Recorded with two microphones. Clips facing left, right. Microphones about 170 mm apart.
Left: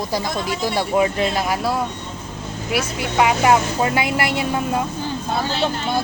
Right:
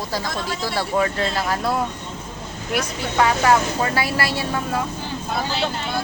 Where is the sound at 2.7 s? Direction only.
10° left (ahead or behind).